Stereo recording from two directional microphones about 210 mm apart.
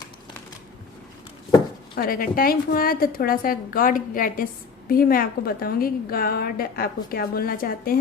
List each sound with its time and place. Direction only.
2.0 s a woman's voice: 45° left (ahead or behind)